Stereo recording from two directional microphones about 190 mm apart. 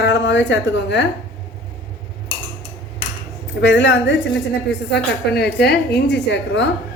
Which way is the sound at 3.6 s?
70° left (ahead or behind).